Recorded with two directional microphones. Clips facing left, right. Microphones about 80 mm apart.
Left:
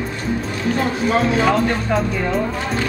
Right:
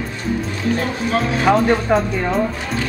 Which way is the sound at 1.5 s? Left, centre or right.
Centre.